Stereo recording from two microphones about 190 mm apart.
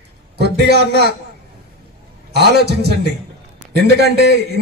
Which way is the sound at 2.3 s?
60° right (ahead or behind).